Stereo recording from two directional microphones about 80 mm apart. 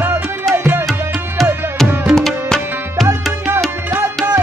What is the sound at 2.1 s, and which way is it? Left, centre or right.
Tabla, centre.